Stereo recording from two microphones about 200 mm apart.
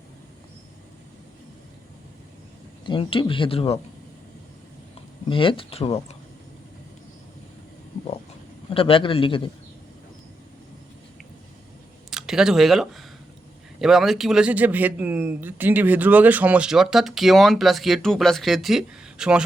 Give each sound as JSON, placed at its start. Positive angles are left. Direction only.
{"t": 2.8, "sound": "speech", "side_deg": 25}
{"t": 5.3, "sound": "speech", "side_deg": 25}
{"t": 8.7, "sound": "speech", "side_deg": 25}
{"t": 12.1, "sound": "speech", "side_deg": -5}